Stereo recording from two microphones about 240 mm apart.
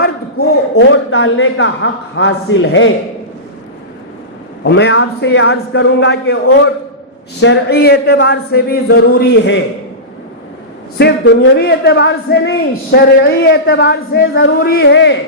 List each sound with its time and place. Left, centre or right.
0.3 s speech: left
4.6 s speech: left
7.4 s speech: left
10.9 s speech: left